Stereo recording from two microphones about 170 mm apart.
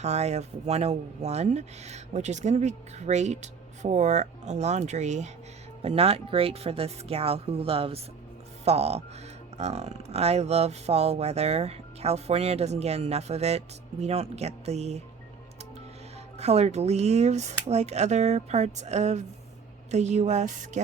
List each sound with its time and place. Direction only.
0.0 s speech: 40° right (ahead or behind)
16.4 s speech: 40° right (ahead or behind)